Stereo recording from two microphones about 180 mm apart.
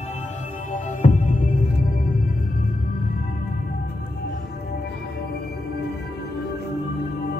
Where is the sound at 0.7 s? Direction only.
45° left (ahead or behind).